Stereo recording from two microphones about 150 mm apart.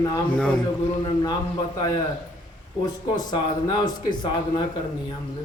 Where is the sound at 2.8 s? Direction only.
30° left (ahead or behind).